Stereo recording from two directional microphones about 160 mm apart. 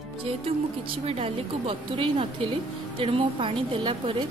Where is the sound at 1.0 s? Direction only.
40° right (ahead or behind).